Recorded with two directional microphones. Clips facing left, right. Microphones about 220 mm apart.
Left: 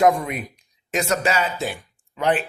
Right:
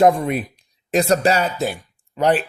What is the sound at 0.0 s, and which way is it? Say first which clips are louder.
Speech: right 3 dB; 30° right (ahead or behind).